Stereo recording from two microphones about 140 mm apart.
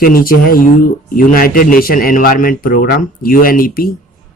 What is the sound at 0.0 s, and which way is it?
Speech, 90° left.